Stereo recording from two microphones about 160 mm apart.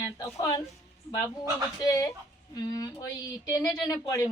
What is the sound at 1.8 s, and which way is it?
A woman's voice, 20° left (ahead or behind).